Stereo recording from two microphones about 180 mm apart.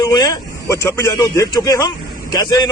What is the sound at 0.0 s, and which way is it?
A man's voice, 20° left (ahead or behind).